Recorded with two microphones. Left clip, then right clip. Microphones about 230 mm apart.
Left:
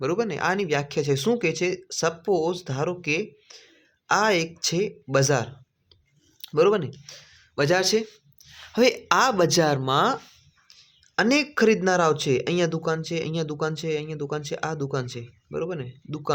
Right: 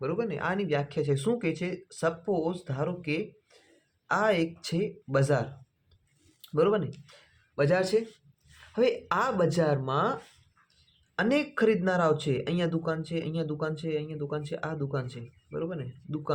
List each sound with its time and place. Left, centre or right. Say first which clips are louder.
0.0 s speech: left 6 dB; left